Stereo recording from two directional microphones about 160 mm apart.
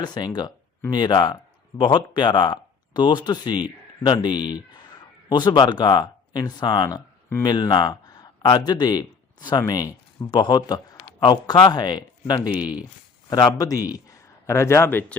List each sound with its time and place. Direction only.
0.0 s a man's voice: 25° left (ahead or behind)